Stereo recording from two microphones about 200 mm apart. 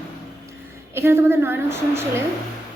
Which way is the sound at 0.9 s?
10° right (ahead or behind).